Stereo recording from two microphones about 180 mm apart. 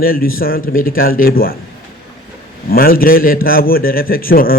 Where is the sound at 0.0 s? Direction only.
55° left (ahead or behind).